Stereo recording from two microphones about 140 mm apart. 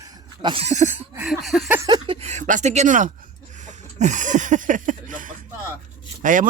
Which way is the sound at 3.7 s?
60° right (ahead or behind).